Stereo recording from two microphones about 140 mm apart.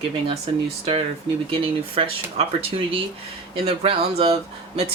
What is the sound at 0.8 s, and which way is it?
Speech, 40° right (ahead or behind).